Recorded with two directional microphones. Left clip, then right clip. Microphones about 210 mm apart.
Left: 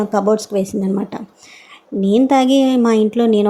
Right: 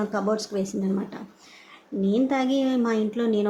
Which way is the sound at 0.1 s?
25° left (ahead or behind).